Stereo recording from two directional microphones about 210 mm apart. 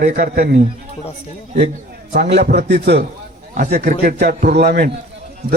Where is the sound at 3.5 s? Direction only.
35° right (ahead or behind).